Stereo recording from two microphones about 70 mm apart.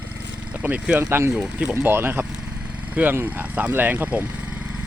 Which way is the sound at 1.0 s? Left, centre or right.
Right.